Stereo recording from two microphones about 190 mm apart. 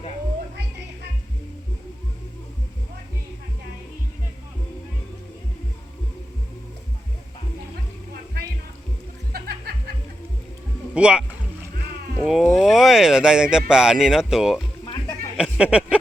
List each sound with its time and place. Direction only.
9.3 s music: 55° right (ahead or behind)
10.9 s speech: 5° right (ahead or behind)